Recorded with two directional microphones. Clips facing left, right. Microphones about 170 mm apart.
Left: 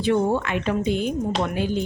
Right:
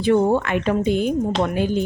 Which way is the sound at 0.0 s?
45° right (ahead or behind).